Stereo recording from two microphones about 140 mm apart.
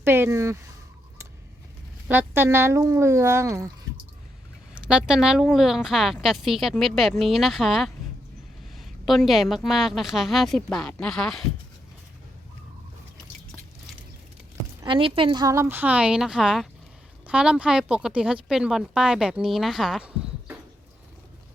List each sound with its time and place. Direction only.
0.0 s speech: 15° right (ahead or behind)
2.0 s speech: 15° right (ahead or behind)
4.7 s speech: 5° right (ahead or behind)
14.8 s a woman's voice: 40° right (ahead or behind)
15.7 s speech: 10° right (ahead or behind)